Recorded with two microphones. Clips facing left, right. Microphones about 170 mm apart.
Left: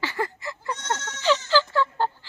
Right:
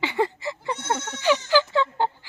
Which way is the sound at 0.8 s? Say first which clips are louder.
Right 2 dB; 10° right (ahead or behind).